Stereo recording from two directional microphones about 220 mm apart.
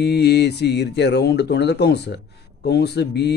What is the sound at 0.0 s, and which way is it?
Speech, 50° left (ahead or behind).